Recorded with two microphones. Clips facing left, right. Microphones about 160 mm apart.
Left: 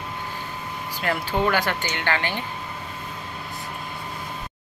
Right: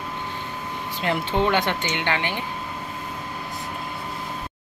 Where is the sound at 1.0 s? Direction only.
20° right (ahead or behind).